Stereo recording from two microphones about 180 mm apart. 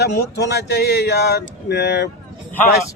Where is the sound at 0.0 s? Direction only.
65° left (ahead or behind).